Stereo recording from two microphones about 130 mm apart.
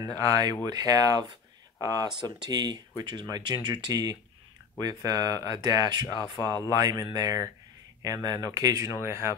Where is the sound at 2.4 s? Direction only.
30° right (ahead or behind).